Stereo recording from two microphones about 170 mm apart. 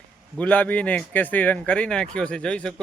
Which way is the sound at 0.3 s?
10° left (ahead or behind).